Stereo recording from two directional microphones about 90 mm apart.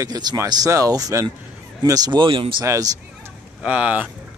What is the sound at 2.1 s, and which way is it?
Speech, 75° right (ahead or behind).